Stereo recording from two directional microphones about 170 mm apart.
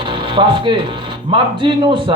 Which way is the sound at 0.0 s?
30° right (ahead or behind).